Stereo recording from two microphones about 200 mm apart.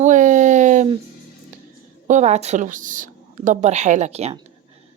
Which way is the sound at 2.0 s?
35° right (ahead or behind).